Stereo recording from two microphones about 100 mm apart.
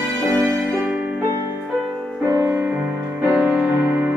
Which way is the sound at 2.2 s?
20° right (ahead or behind).